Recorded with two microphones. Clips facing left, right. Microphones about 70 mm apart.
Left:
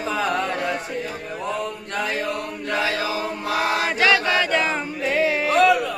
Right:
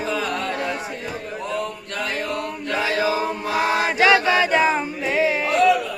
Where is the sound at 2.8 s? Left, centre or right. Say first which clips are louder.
Right 4 dB; right; by 5.5 s centre.